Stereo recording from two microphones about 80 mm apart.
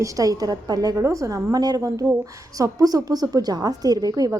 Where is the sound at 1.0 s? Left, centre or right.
Right.